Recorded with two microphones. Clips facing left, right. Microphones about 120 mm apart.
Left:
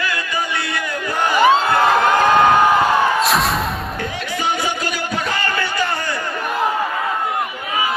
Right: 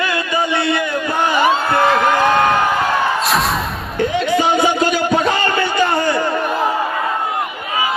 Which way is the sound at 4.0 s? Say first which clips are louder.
Right 13 dB; 25° right (ahead or behind).